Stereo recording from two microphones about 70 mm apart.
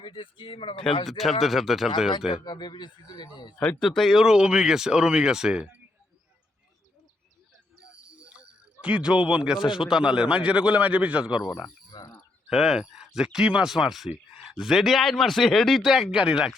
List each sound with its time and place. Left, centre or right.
0.9 s speech: centre
2.4 s speech: left
3.8 s speech: centre
4.1 s a man's voice: centre
8.1 s music: centre
8.8 s a man's voice: centre
11.9 s a sound: left
12.5 s a man's voice: centre